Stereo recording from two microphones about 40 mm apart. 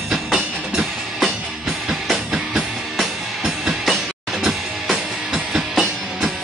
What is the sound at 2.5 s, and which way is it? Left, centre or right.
Music, centre.